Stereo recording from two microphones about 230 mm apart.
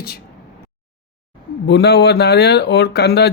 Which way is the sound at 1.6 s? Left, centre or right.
Left.